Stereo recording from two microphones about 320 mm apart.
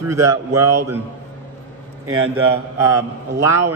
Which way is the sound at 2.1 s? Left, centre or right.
Right.